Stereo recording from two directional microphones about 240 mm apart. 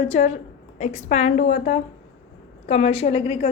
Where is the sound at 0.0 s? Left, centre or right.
Left.